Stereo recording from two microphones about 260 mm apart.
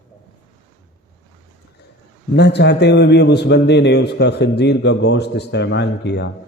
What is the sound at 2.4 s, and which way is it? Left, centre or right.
A man's voice, left.